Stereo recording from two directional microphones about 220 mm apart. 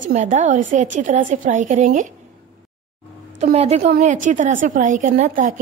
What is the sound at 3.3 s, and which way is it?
A woman's voice, 30° right (ahead or behind).